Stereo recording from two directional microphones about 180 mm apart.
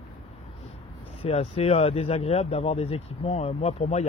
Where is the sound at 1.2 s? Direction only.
35° left (ahead or behind).